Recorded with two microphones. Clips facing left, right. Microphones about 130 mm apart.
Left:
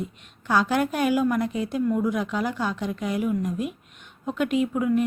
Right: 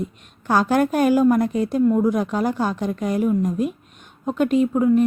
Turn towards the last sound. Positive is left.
turn(degrees=-35)  # may be behind; listen again after turning